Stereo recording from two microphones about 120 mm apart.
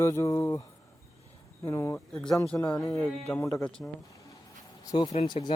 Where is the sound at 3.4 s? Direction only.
25° left (ahead or behind).